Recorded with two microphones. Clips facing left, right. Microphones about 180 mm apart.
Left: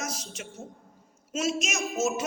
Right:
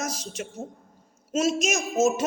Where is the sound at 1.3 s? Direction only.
40° right (ahead or behind).